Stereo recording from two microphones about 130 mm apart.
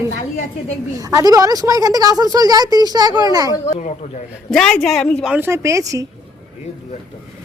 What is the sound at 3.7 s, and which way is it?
Speech, 60° left (ahead or behind).